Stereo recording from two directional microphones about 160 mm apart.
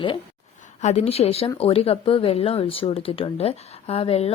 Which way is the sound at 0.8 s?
45° left (ahead or behind).